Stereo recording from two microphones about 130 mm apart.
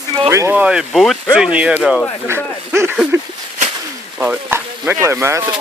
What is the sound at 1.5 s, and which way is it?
Speech, 10° right (ahead or behind).